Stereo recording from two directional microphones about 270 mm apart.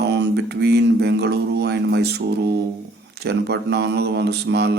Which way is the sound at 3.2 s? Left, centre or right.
Right.